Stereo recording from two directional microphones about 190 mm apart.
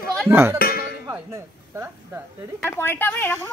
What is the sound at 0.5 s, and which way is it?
Music, 55° left (ahead or behind).